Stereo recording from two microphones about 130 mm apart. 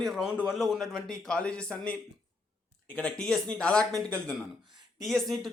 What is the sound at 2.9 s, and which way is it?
Speech, 5° left (ahead or behind).